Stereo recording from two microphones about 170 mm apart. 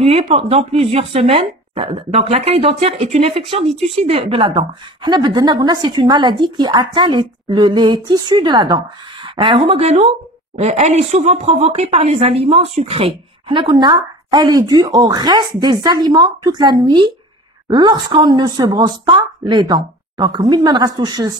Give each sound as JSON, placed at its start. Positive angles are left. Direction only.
{"t": 0.0, "sound": "a woman's voice", "side_deg": -35}